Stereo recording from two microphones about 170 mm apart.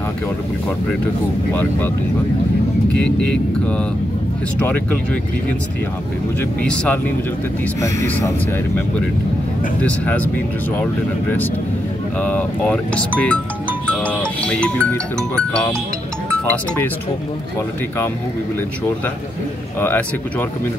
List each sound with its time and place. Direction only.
1.5 s speech: 10° left (ahead or behind)
6.6 s speech: 5° left (ahead or behind)
7.8 s speech: 15° left (ahead or behind)
9.8 s speech: 10° left (ahead or behind)
12.2 s speech: 10° left (ahead or behind)
14.0 s music: 5° left (ahead or behind)
19.8 s speech: 10° left (ahead or behind)